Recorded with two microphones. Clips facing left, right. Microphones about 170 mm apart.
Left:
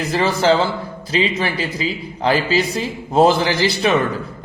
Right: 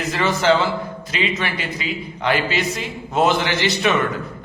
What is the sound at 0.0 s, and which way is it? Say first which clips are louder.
A man's voice: left 2 dB; 35° left (ahead or behind).